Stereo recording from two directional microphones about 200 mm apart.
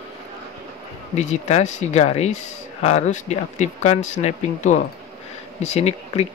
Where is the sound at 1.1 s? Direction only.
35° left (ahead or behind).